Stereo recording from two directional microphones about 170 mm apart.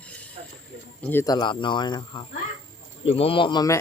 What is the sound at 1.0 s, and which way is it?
Speech, 15° left (ahead or behind).